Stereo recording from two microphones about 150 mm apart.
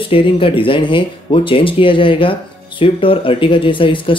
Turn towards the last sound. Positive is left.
turn(degrees=35)  # may be behind; listen again after turning